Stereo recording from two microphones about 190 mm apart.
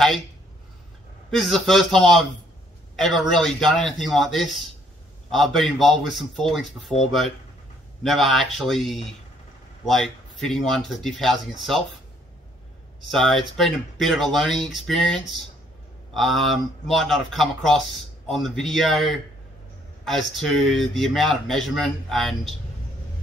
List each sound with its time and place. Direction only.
1.3 s speech: centre (ahead or behind)
8.0 s speech: centre (ahead or behind)
13.1 s speech: centre (ahead or behind)